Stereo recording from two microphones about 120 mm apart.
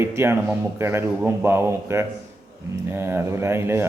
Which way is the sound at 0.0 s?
20° right (ahead or behind).